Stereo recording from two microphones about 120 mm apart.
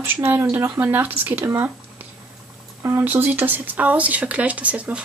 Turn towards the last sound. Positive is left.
turn(degrees=-10)  # may be behind; listen again after turning